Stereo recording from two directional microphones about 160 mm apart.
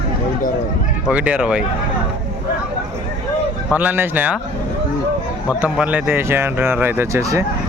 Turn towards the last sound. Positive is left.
turn(degrees=-20)  # may be behind; listen again after turning